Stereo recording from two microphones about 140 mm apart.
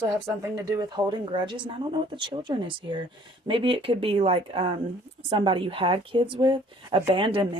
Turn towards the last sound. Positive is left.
turn(degrees=-35)  # may be behind; listen again after turning